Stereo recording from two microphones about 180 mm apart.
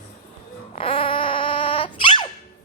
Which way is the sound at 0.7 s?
30° left (ahead or behind).